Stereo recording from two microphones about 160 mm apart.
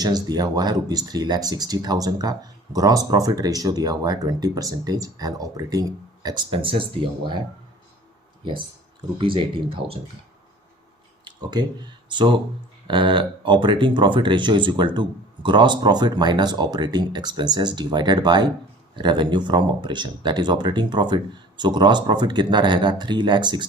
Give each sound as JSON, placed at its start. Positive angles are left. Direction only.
{"t": 0.0, "sound": "speech", "side_deg": -25}
{"t": 9.1, "sound": "speech", "side_deg": -30}
{"t": 12.0, "sound": "speech", "side_deg": -30}